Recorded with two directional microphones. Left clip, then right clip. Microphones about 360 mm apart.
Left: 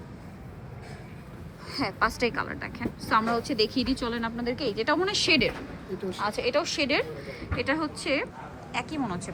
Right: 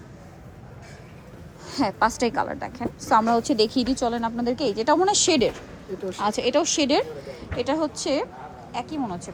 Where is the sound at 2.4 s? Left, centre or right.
Centre.